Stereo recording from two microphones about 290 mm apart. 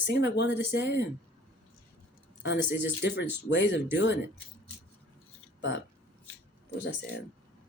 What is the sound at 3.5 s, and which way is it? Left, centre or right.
Speech, left.